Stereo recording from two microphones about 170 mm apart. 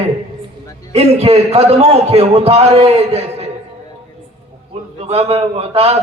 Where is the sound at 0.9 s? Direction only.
35° right (ahead or behind).